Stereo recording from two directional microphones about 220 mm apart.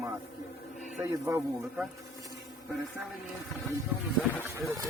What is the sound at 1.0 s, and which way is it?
Speech, 10° right (ahead or behind).